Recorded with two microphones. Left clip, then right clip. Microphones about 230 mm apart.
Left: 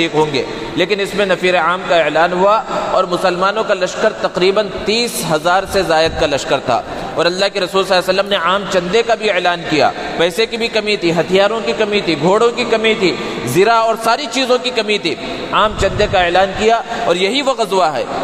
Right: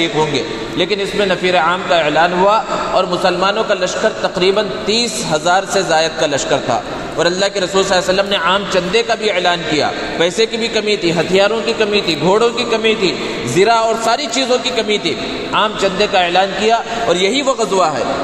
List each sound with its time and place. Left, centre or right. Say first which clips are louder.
0.0 s a man's voice: left 1 dB; left